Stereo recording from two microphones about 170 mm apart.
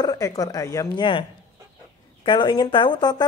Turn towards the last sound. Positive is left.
turn(degrees=25)  # may be behind; listen again after turning